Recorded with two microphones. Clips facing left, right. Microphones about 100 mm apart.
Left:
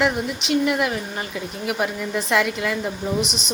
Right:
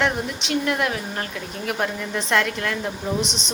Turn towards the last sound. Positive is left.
turn(degrees=5)  # may be behind; listen again after turning